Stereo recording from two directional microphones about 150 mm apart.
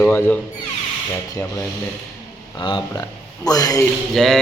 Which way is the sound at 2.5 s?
35° left (ahead or behind).